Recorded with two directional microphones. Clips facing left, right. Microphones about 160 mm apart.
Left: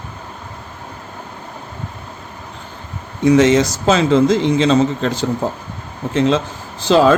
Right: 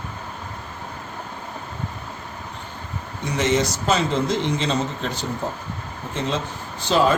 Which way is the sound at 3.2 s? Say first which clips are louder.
Left 10 dB; 90° left.